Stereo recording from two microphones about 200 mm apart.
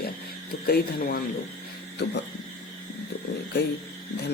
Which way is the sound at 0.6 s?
50° left (ahead or behind).